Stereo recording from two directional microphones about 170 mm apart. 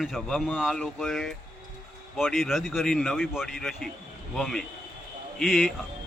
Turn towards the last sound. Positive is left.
turn(degrees=0)  # may be behind; listen again after turning